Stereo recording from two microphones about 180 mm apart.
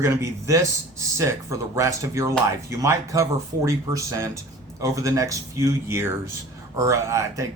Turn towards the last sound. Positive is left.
turn(degrees=-15)  # may be behind; listen again after turning